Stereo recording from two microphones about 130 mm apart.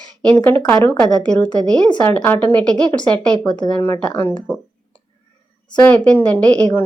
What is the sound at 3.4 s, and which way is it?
Speech, 35° left (ahead or behind).